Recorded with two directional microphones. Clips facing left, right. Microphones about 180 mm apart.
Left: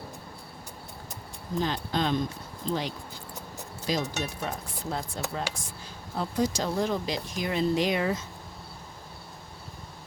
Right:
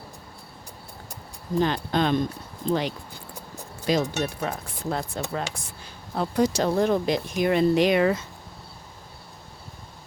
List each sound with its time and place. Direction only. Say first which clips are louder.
1.6 s speech: right 4 dB; 60° right (ahead or behind)